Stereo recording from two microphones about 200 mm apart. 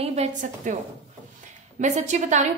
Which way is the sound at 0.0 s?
35° right (ahead or behind).